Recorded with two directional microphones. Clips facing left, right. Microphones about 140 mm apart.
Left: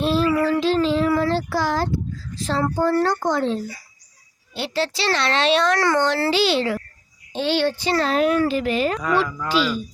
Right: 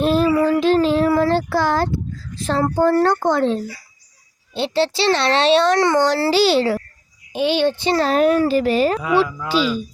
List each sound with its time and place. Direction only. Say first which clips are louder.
0.0 s a sound: right 3 dB; 50° right (ahead or behind)
2.3 s speech: right 3 dB; 55° right (ahead or behind)
4.5 s a child's voice: right 5 dB; 25° right (ahead or behind)
7.3 s a child's voice: right 3 dB; 15° right (ahead or behind)
8.1 s a child's voice: right 4 dB; 45° right (ahead or behind)
9.0 s speech: right 3 dB; 5° right (ahead or behind)